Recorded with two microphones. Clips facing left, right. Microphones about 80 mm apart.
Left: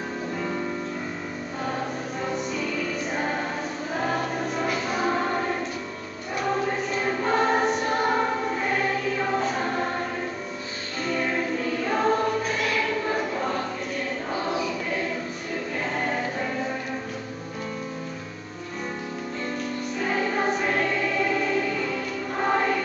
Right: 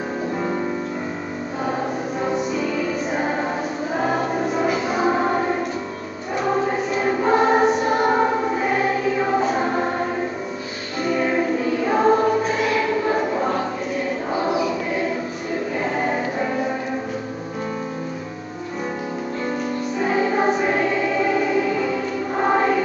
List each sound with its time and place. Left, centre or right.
0.4 s music: right
2.2 s music: centre
6.4 s choir: centre
8.1 s choir: centre
8.6 s choir: centre
11.1 s music: centre
12.5 s choir: centre
14.3 s choir: centre
15.8 s music: centre
20.0 s choir: centre